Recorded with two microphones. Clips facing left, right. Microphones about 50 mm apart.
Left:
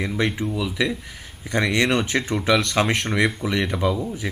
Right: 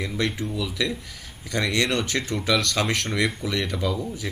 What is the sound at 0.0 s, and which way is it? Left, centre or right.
Speech, left.